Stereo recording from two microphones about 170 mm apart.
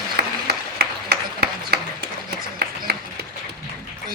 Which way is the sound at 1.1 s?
70° right (ahead or behind).